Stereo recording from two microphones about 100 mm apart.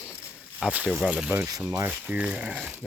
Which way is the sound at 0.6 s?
15° right (ahead or behind).